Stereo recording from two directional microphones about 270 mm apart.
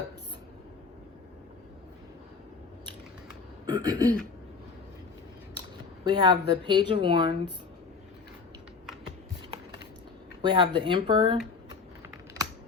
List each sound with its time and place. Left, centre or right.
3.7 s speech: centre
6.1 s speech: centre
10.4 s speech: centre